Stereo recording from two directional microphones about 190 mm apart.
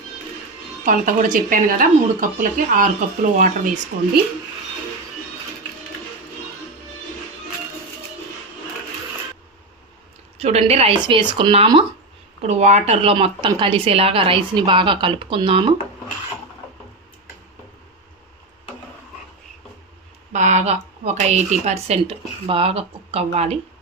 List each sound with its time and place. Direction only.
0.9 s a woman's voice: 45° right (ahead or behind)
10.3 s a woman's voice: 30° right (ahead or behind)
20.3 s a sound: 40° right (ahead or behind)
21.0 s a woman's voice: 35° right (ahead or behind)